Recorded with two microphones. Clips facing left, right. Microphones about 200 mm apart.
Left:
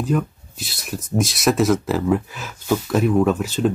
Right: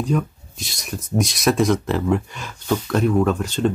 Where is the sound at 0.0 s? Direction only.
Centre (ahead or behind).